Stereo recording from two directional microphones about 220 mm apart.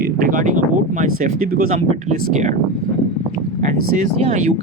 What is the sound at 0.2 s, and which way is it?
Speech, 40° right (ahead or behind).